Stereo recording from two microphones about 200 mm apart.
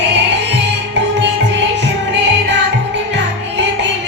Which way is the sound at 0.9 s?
60° right (ahead or behind).